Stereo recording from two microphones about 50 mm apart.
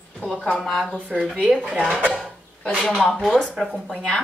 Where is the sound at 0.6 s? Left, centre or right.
Centre.